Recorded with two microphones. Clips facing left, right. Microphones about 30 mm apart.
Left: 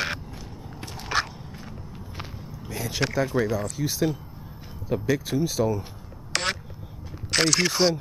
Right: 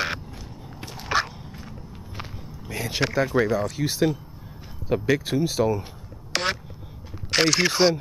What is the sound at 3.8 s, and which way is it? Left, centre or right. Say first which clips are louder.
Speech: right 3 dB; right.